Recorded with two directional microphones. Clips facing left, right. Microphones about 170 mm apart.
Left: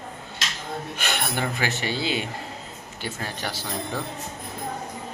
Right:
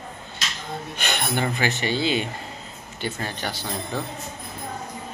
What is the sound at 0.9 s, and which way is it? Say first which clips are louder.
Speech: right 3 dB; 5° left (ahead or behind).